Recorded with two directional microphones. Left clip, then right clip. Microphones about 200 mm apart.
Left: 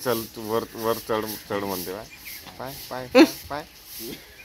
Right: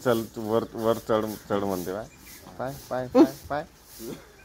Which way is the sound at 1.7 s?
35° right (ahead or behind).